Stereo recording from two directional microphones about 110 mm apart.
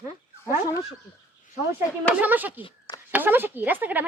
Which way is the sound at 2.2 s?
15° right (ahead or behind).